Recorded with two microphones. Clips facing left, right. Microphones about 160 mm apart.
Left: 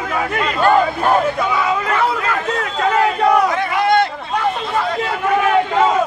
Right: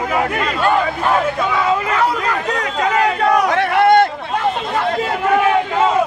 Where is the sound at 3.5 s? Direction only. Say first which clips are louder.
Right 4 dB; 65° right (ahead or behind).